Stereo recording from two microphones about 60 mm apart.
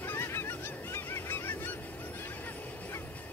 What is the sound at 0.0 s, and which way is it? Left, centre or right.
Goose, left.